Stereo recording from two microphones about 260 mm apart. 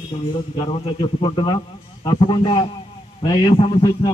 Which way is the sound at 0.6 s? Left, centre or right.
Centre.